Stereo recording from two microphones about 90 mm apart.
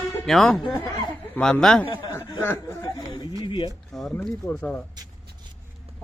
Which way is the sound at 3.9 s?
5° left (ahead or behind).